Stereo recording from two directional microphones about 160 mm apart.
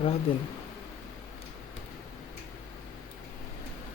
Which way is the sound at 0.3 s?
35° left (ahead or behind).